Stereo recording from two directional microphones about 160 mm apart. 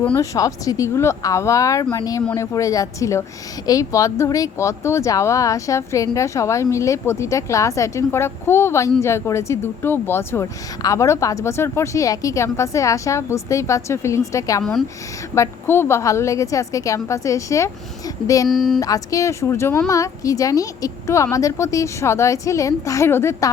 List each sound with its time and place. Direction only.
0.2 s speech: 20° left (ahead or behind)
14.6 s speech: centre (ahead or behind)
15.4 s speech: 15° left (ahead or behind)
18.4 s speech: centre (ahead or behind)
18.8 s speech: 20° left (ahead or behind)